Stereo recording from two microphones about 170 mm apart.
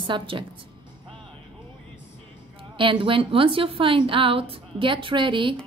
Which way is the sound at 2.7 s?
30° right (ahead or behind).